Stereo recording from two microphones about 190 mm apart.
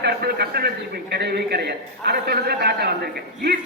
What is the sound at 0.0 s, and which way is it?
A man's voice, 55° right (ahead or behind).